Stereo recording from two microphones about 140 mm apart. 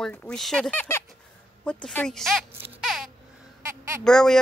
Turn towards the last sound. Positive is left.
turn(degrees=5)  # may be behind; listen again after turning